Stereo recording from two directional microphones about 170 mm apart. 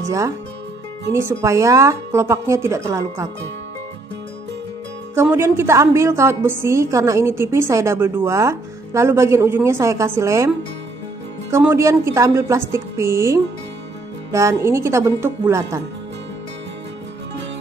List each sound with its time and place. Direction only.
1.1 s a woman's voice: 15° right (ahead or behind)
5.1 s a woman's voice: 15° right (ahead or behind)
11.5 s a woman's voice: 15° right (ahead or behind)